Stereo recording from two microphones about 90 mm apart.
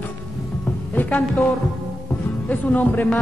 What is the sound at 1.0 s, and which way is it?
Music, 20° left (ahead or behind).